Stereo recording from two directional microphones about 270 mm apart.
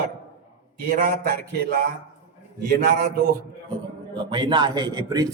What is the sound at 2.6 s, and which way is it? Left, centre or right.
Speech, right.